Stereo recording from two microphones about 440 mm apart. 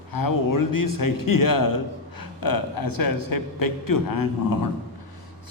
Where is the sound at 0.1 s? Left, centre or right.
Left.